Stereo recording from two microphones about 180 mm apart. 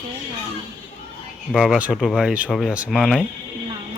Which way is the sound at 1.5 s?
Centre (ahead or behind).